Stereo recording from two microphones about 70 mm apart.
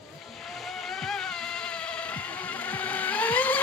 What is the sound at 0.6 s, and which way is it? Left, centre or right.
Vehicle, centre.